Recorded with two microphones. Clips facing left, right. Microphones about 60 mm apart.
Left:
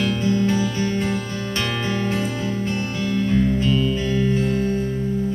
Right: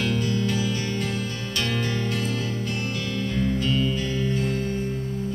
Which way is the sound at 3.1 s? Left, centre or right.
Left.